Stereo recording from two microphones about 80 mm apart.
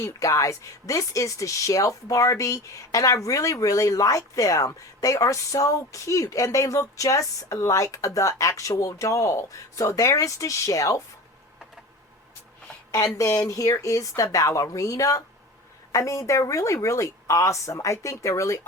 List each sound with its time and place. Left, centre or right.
0.0 s speech: left
13.1 s a woman's voice: left